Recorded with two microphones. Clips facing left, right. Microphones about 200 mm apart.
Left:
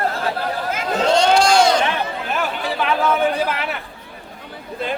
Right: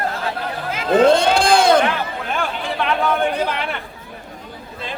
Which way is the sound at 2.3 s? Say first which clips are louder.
Even; 5° left (ahead or behind).